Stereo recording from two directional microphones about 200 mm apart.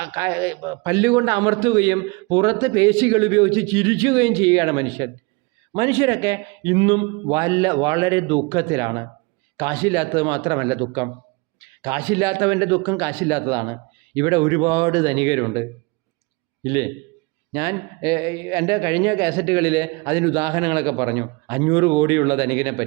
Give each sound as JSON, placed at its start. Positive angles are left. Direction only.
{"t": 0.0, "sound": "a man's voice", "side_deg": -15}
{"t": 16.6, "sound": "a man's voice", "side_deg": -15}